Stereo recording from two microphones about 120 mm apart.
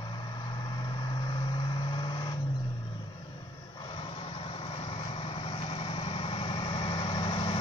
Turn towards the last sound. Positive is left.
turn(degrees=45)  # may be behind; listen again after turning